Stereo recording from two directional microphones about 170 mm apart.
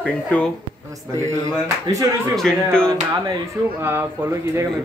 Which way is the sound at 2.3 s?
5° left (ahead or behind).